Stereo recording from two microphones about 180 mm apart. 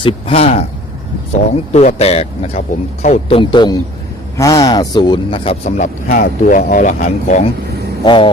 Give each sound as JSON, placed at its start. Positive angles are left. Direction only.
{"t": 0.0, "sound": "speech", "side_deg": 35}
{"t": 1.7, "sound": "speech", "side_deg": 40}
{"t": 8.0, "sound": "speech", "side_deg": 30}